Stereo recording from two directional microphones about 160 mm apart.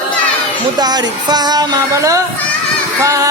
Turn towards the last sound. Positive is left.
turn(degrees=-20)  # may be behind; listen again after turning